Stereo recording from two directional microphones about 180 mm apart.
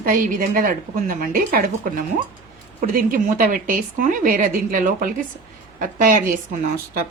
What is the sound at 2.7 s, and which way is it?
Speech, 50° right (ahead or behind).